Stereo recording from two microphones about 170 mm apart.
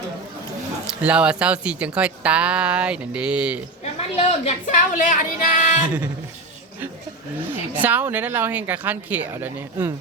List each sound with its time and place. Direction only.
0.9 s speech: 5° right (ahead or behind)
3.9 s speech: 40° left (ahead or behind)
7.5 s speech: 10° right (ahead or behind)